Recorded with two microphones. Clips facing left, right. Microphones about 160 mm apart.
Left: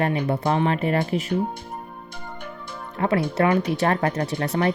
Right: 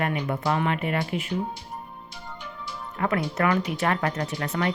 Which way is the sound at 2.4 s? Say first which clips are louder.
Even; 55° left (ahead or behind).